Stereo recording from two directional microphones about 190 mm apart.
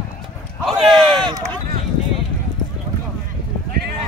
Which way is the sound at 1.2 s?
20° right (ahead or behind).